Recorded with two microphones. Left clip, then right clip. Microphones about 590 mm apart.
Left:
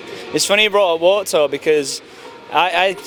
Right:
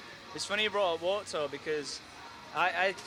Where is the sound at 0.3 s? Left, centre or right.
Left.